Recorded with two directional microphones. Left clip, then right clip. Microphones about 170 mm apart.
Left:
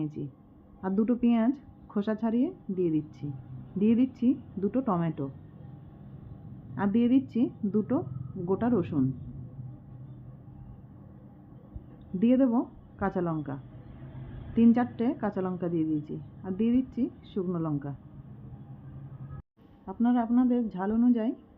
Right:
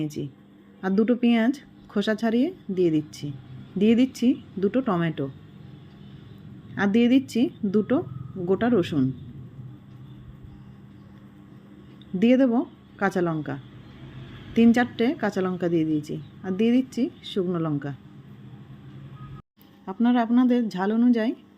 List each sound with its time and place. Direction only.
0.0 s a woman's voice: 20° right (ahead or behind)
6.7 s a woman's voice: 20° right (ahead or behind)
12.2 s a woman's voice: 20° right (ahead or behind)
19.8 s a woman's voice: 30° right (ahead or behind)